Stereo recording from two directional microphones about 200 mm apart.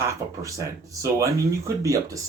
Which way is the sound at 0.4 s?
15° right (ahead or behind).